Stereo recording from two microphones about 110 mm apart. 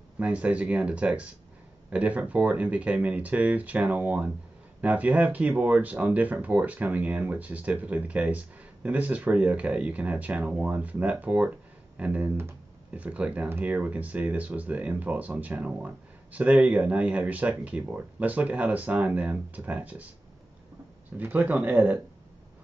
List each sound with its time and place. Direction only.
0.2 s speech: 10° right (ahead or behind)
21.2 s speech: 15° right (ahead or behind)